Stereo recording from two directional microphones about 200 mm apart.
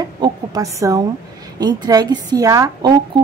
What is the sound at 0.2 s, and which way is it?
A woman's voice, 15° right (ahead or behind).